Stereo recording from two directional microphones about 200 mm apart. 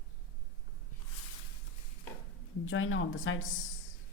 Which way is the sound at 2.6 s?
90° left.